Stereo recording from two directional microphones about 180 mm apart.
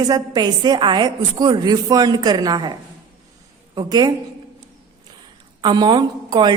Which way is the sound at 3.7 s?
25° right (ahead or behind).